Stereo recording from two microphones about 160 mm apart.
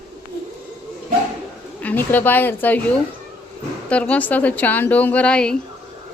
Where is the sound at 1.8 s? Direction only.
10° left (ahead or behind).